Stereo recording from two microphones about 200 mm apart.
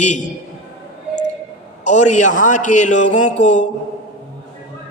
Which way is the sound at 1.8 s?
35° left (ahead or behind).